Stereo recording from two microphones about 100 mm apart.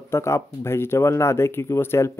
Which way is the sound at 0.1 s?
25° left (ahead or behind).